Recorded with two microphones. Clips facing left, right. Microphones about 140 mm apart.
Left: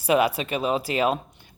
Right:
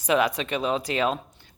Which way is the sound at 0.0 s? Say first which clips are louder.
Left 2 dB; 10° left (ahead or behind).